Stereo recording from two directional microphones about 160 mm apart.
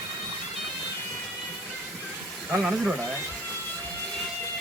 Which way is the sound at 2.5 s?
5° right (ahead or behind).